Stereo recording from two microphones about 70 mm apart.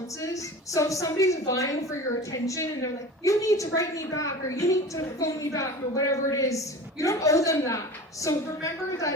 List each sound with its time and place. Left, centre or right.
0.7 s a woman's voice: left
3.2 s a woman's voice: left